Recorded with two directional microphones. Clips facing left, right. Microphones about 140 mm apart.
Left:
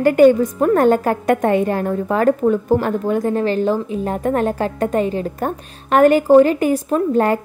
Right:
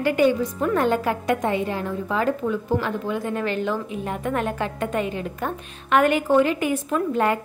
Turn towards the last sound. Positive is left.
turn(degrees=40)  # may be behind; listen again after turning